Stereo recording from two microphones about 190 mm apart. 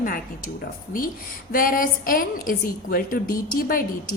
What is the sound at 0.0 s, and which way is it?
Speech, 50° left (ahead or behind).